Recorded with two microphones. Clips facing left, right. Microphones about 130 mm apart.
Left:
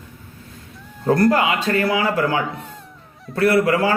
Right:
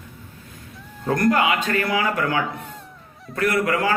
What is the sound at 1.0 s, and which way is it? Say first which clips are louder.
Speech: left 3 dB; 30° left (ahead or behind).